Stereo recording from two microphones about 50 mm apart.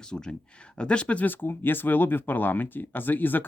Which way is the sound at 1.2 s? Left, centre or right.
Left.